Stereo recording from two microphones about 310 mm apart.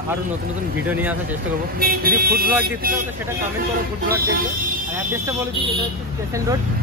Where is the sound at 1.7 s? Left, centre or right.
Right.